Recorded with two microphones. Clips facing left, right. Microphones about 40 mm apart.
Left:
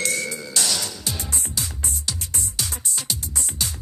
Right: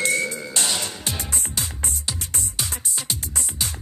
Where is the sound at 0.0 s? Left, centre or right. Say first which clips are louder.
Right 3 dB; right.